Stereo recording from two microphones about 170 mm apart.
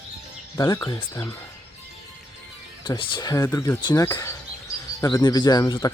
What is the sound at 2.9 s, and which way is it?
Speech, 30° left (ahead or behind).